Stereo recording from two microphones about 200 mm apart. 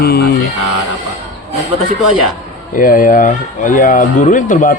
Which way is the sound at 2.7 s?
45° left (ahead or behind).